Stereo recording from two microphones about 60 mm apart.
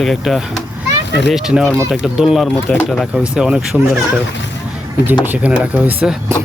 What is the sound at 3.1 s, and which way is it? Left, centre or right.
Speech, centre.